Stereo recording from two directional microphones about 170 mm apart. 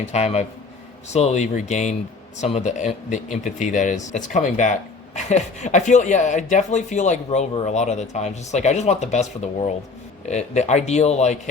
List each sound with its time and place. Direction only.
0.0 s speech: 40° left (ahead or behind)